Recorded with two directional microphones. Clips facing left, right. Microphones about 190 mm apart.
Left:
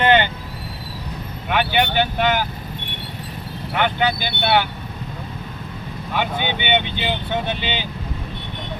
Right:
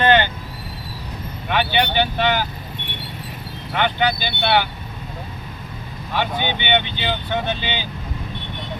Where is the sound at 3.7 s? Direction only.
5° left (ahead or behind).